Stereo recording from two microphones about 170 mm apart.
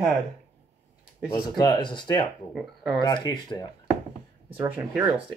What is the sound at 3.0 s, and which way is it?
Speech, 25° left (ahead or behind).